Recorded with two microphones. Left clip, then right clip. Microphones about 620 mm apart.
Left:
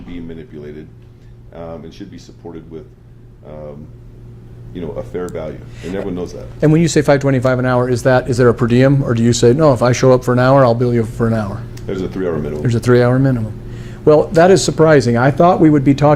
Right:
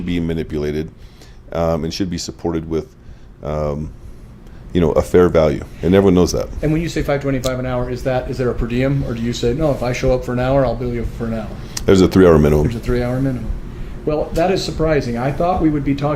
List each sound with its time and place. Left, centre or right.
0.1 s speech: right
4.7 s speech: right
6.6 s speech: left
11.7 s speech: right
12.6 s speech: left